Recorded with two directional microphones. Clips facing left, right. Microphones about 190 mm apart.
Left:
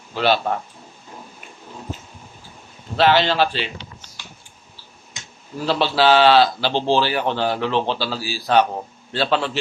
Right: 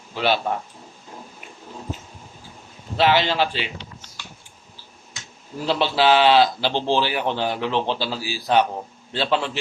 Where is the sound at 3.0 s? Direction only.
15° right (ahead or behind).